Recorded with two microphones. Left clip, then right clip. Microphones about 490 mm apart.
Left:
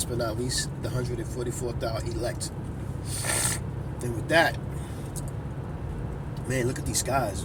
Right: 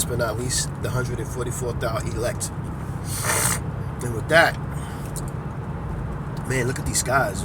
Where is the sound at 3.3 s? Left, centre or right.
Left.